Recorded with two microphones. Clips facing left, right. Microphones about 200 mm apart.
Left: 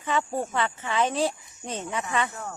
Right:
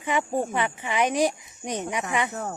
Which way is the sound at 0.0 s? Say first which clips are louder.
Right 2 dB; 15° right (ahead or behind).